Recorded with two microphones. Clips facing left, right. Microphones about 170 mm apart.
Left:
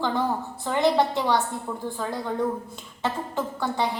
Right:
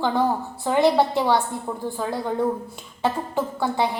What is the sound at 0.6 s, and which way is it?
A woman's voice, 10° right (ahead or behind).